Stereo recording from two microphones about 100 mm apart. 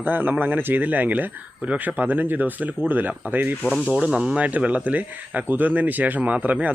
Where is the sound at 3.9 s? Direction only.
5° right (ahead or behind).